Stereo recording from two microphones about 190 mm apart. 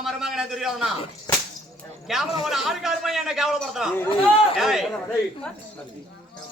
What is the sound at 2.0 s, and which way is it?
A man's voice, centre (ahead or behind).